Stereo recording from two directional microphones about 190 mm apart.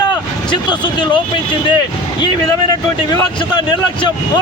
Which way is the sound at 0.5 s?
25° left (ahead or behind).